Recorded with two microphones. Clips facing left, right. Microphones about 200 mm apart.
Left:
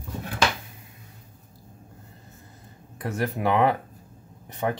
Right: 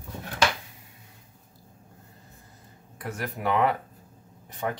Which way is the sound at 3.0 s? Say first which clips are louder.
Left 5 dB; 30° left (ahead or behind).